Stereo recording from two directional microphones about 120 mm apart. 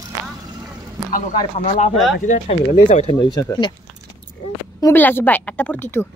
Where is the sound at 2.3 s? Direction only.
75° left (ahead or behind).